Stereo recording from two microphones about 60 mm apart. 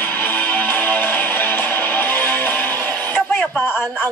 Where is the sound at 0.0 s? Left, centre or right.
Left.